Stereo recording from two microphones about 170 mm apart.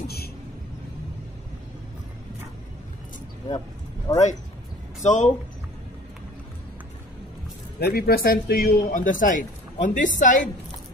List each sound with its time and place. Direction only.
4.1 s speech: 20° left (ahead or behind)
5.0 s speech: 45° left (ahead or behind)
7.8 s speech: 65° left (ahead or behind); by 10.5 s 50° left (ahead or behind)